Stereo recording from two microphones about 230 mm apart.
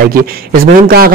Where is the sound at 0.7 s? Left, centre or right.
Right.